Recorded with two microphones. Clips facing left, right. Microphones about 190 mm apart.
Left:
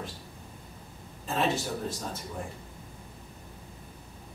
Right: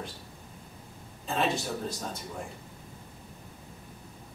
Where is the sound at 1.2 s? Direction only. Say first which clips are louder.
Left 1 dB; centre (ahead or behind).